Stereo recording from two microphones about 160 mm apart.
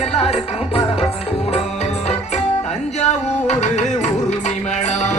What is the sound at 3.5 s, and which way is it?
Music, 45° left (ahead or behind).